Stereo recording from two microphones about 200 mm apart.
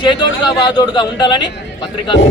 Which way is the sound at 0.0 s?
20° left (ahead or behind).